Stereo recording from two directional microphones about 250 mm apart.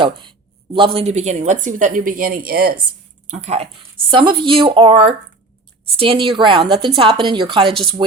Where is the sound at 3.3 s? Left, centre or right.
Right.